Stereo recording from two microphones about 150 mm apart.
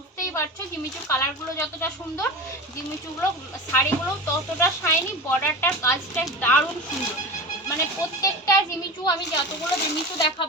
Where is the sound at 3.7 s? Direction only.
15° left (ahead or behind).